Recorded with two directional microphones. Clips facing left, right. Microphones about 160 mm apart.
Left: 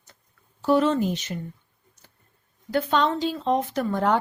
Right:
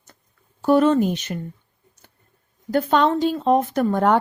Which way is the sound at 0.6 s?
50° right (ahead or behind).